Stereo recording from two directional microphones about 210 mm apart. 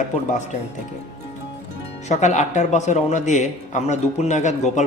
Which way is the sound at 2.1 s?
35° left (ahead or behind).